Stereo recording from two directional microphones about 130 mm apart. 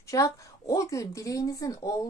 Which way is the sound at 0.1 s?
25° left (ahead or behind).